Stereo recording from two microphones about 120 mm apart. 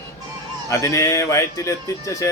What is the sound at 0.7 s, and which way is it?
Speech, 25° left (ahead or behind).